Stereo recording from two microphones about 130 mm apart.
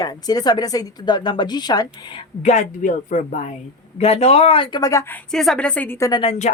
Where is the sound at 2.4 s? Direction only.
65° left (ahead or behind).